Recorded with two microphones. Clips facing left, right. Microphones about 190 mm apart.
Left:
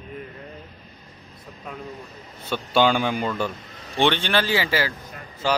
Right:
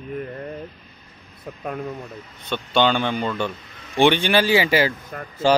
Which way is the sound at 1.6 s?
50° right (ahead or behind).